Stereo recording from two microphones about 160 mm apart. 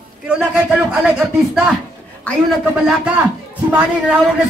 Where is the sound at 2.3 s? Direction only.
10° left (ahead or behind).